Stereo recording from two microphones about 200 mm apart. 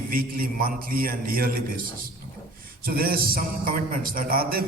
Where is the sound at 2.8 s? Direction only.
45° right (ahead or behind).